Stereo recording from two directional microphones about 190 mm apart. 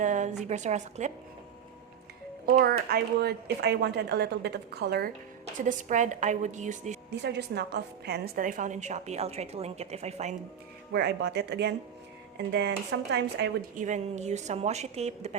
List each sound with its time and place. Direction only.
0.0 s a woman's voice: 40° right (ahead or behind)
2.9 s a woman's voice: 55° right (ahead or behind)
5.6 s a woman's voice: 40° right (ahead or behind)
7.1 s a woman's voice: 60° right (ahead or behind); by 10.3 s 35° right (ahead or behind)
10.9 s a woman's voice: 60° right (ahead or behind)
13.7 s a woman's voice: 40° right (ahead or behind)